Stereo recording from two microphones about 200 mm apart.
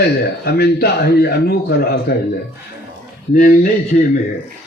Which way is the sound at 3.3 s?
45° left (ahead or behind).